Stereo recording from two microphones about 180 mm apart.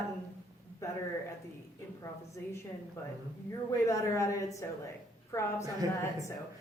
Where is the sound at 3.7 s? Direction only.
15° left (ahead or behind).